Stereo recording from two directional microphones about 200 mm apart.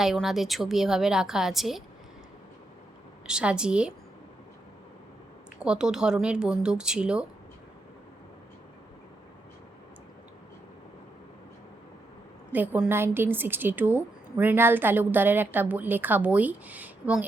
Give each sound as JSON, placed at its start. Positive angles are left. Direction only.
{"t": 0.0, "sound": "a woman's voice", "side_deg": 0}
{"t": 3.2, "sound": "a woman's voice", "side_deg": -5}
{"t": 5.6, "sound": "a woman's voice", "side_deg": -5}
{"t": 12.5, "sound": "a woman's voice", "side_deg": -10}